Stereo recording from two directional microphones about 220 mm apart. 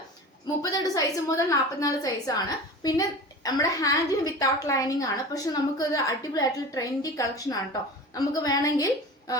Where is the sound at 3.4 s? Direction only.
15° left (ahead or behind).